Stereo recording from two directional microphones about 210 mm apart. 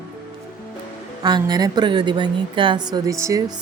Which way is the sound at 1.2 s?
20° right (ahead or behind).